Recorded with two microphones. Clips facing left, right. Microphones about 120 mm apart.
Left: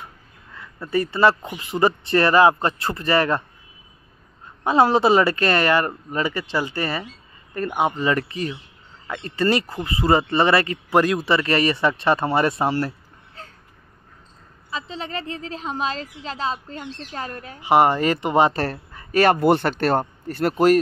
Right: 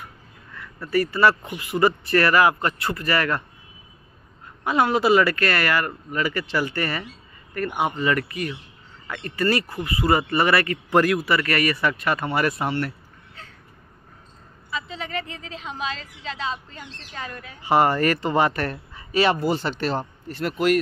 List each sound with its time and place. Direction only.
0.6 s speech: 20° left (ahead or behind)
4.6 s speech: 30° left (ahead or behind)
6.3 s speech: 15° left (ahead or behind); by 13.5 s 35° left (ahead or behind)
14.7 s a woman's voice: 30° left (ahead or behind)
17.6 s speech: 15° left (ahead or behind)
18.9 s a man's voice: 50° left (ahead or behind)